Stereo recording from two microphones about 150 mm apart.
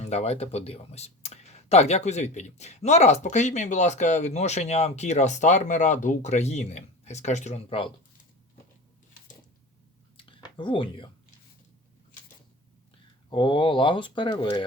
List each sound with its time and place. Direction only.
0.0 s speech: 45° left (ahead or behind)
10.2 s a sound: 35° left (ahead or behind)
13.3 s speech: 30° left (ahead or behind)